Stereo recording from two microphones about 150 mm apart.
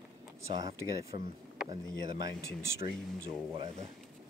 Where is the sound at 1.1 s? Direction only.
40° right (ahead or behind).